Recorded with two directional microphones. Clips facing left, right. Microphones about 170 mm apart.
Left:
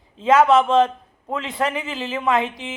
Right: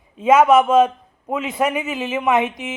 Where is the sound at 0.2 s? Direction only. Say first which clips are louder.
Right 2 dB; 20° right (ahead or behind).